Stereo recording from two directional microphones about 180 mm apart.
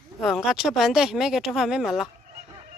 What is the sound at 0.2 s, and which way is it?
Speech, centre (ahead or behind).